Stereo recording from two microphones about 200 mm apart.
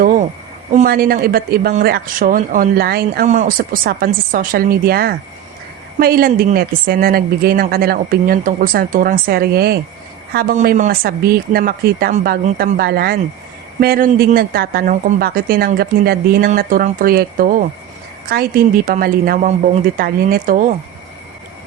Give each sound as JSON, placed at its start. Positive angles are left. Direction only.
{"t": 0.7, "sound": "a woman's voice", "side_deg": -45}
{"t": 3.2, "sound": "a woman's voice", "side_deg": -40}